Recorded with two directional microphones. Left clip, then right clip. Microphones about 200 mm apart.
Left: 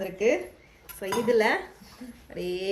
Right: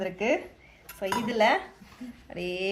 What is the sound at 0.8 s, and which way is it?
Dishes, 50° right (ahead or behind).